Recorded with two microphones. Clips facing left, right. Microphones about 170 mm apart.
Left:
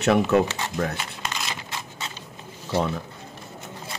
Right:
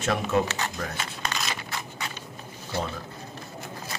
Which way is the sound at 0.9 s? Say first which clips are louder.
Even; 20° left (ahead or behind).